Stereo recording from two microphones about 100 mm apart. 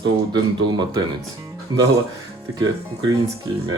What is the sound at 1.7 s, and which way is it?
Speech, 45° right (ahead or behind).